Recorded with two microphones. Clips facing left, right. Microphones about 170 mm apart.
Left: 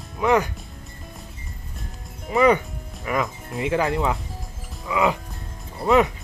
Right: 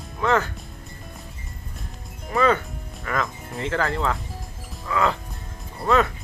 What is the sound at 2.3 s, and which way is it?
Music, 15° left (ahead or behind).